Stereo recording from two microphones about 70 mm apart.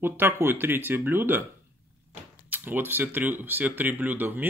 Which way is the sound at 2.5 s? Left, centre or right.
Right.